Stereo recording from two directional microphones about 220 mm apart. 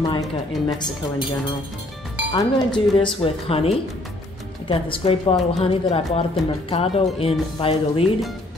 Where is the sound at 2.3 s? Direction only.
20° left (ahead or behind).